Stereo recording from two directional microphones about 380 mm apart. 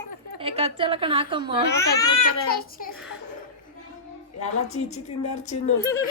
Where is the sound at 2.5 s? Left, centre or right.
Left.